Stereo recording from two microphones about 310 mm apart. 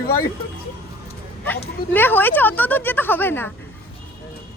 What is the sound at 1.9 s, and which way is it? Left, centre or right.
A woman's voice, centre.